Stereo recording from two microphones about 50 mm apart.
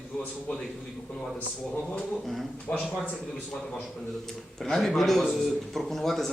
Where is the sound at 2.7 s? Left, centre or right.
Left.